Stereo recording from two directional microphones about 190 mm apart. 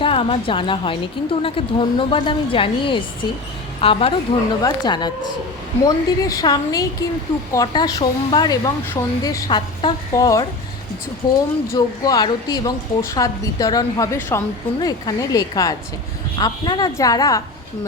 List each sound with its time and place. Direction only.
0.0 s a woman's voice: 30° left (ahead or behind)